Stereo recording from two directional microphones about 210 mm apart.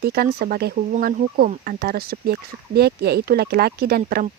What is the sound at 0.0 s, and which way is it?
Speech, 45° right (ahead or behind).